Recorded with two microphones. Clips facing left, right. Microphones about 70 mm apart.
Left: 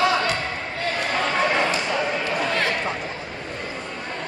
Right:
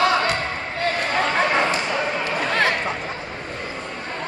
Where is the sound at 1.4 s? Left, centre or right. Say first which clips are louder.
Even; centre.